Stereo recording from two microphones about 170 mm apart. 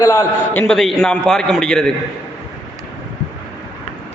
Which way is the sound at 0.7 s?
Centre (ahead or behind).